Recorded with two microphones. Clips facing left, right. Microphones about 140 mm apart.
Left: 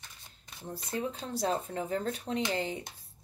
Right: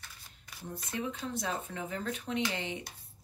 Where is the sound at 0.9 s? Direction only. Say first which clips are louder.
Left 2 dB; 35° left (ahead or behind).